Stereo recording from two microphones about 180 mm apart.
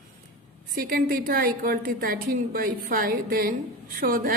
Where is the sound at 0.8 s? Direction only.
55° right (ahead or behind).